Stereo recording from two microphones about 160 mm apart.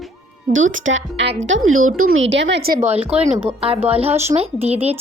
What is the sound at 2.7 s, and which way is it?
A woman's voice, 40° right (ahead or behind).